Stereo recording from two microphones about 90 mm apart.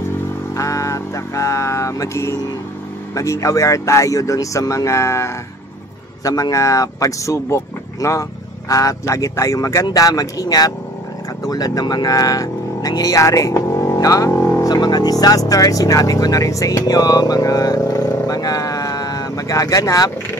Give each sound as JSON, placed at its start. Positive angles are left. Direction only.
{"t": 0.6, "sound": "vehicle", "side_deg": 35}
{"t": 3.2, "sound": "speech", "side_deg": 40}
{"t": 13.6, "sound": "music", "side_deg": 30}
{"t": 13.9, "sound": "speech", "side_deg": 40}
{"t": 14.3, "sound": "vehicle", "side_deg": 30}
{"t": 14.6, "sound": "speech", "side_deg": 50}